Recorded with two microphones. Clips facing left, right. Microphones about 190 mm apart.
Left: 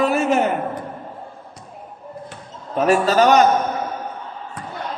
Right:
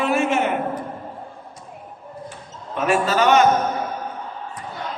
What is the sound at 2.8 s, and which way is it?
Speech, 40° left (ahead or behind).